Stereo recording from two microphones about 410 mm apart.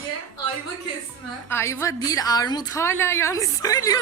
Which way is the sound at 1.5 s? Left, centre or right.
Centre.